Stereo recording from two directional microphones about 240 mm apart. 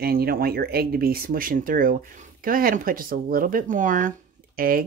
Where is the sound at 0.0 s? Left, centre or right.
Right.